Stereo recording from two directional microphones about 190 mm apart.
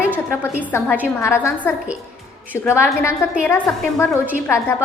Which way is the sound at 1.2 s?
15° left (ahead or behind).